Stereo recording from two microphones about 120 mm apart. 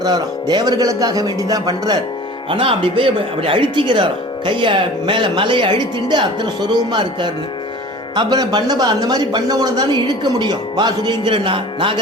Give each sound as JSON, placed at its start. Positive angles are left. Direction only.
{"t": 0.0, "sound": "speech", "side_deg": -35}
{"t": 2.5, "sound": "speech", "side_deg": -45}